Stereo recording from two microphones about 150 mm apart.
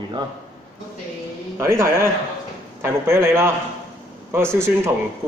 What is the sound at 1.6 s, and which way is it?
A man's voice, 20° right (ahead or behind).